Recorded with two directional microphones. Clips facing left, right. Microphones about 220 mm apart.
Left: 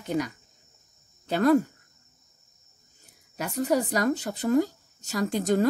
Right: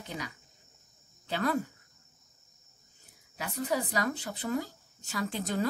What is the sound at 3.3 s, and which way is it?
Speech, 45° left (ahead or behind).